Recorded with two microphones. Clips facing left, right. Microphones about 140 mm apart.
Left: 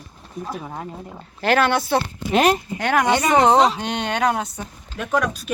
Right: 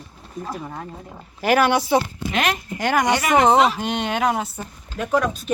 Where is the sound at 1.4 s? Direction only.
10° right (ahead or behind).